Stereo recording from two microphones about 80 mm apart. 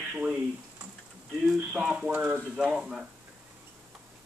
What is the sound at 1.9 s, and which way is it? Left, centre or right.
Speech, centre.